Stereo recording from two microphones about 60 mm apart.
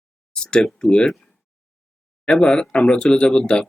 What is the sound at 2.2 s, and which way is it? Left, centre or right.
Speech, centre.